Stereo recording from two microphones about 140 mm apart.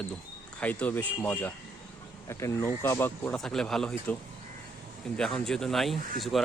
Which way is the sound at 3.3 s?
5° left (ahead or behind).